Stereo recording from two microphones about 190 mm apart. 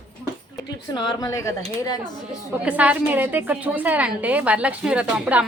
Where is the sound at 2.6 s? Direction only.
5° right (ahead or behind).